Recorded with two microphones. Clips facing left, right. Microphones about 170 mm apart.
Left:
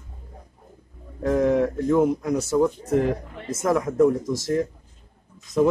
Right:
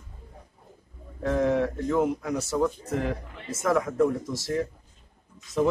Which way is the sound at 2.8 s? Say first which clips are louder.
Left 7 dB; 45° left (ahead or behind).